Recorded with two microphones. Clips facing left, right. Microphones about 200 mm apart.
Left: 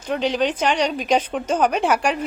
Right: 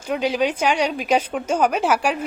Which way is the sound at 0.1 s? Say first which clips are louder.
Even; 10° right (ahead or behind).